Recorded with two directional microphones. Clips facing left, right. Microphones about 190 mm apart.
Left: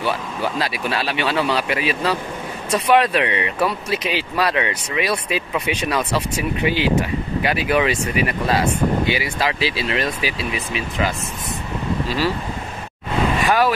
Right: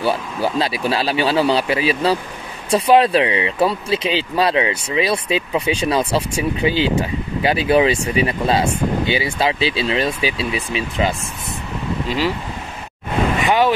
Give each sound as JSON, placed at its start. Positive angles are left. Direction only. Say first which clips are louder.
{"t": 0.0, "sound": "speech", "louder": "right 3 dB", "side_deg": -30}
{"t": 13.4, "sound": "speech", "louder": "right 2 dB", "side_deg": -20}